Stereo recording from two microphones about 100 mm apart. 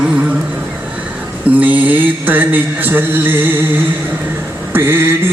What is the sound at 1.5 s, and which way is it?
Mantra, 15° right (ahead or behind).